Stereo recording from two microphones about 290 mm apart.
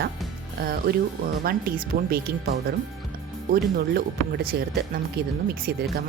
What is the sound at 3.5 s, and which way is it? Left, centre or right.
Speech, right.